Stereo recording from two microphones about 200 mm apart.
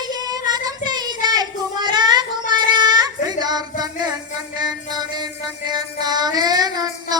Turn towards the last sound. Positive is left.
turn(degrees=-20)  # may be behind; listen again after turning